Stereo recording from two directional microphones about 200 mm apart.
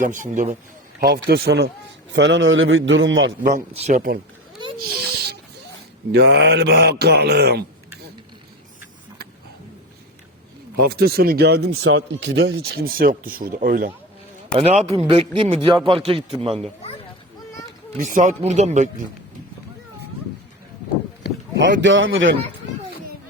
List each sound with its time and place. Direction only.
0.0 s a man's voice: 40° right (ahead or behind)
0.9 s a man's voice: 50° right (ahead or behind); by 3.3 s 75° right (ahead or behind)
3.4 s a man's voice: 35° right (ahead or behind)
6.1 s speech: 55° right (ahead or behind)
10.8 s speech: 50° right (ahead or behind)
11.8 s speech: 80° right; by 13.9 s 45° right (ahead or behind)
14.6 s a man's voice: 30° right (ahead or behind)
18.0 s a man's voice: 40° right (ahead or behind)
21.2 s a sound: 55° left (ahead or behind)
21.6 s a man's voice: 70° right (ahead or behind)